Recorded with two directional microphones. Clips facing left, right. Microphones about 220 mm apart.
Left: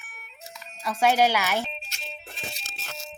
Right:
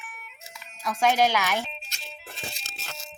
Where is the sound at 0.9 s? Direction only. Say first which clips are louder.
Left 1 dB; 10° left (ahead or behind).